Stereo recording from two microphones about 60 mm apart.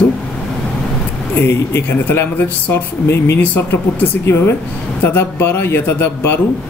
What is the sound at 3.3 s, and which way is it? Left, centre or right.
Speech, left.